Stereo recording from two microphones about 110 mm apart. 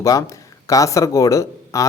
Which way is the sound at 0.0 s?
30° left (ahead or behind).